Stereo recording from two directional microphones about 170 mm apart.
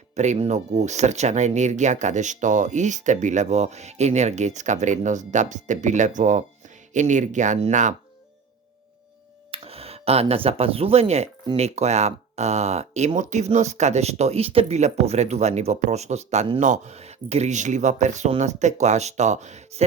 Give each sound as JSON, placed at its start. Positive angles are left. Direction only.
{"t": 0.2, "sound": "speech", "side_deg": -40}
{"t": 9.5, "sound": "speech", "side_deg": -35}